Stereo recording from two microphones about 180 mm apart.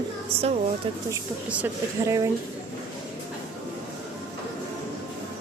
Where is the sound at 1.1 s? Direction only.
15° right (ahead or behind).